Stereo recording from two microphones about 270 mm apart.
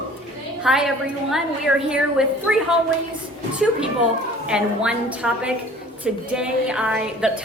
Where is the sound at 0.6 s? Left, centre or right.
Centre.